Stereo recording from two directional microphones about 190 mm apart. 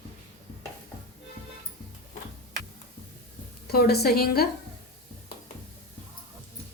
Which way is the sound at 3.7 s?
55° left (ahead or behind).